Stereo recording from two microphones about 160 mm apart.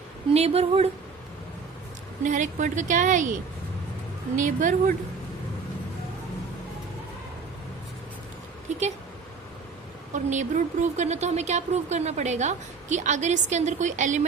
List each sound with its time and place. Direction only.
0.3 s speech: 40° right (ahead or behind)
2.2 s speech: 50° right (ahead or behind)
4.4 s speech: 55° right (ahead or behind)
10.1 s speech: 50° right (ahead or behind)